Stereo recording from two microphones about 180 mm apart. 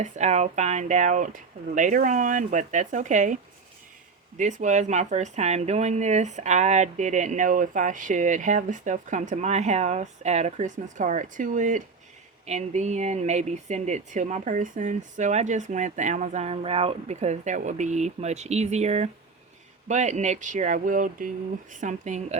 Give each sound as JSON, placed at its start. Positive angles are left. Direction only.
{"t": 0.0, "sound": "speech", "side_deg": -40}
{"t": 4.4, "sound": "speech", "side_deg": -45}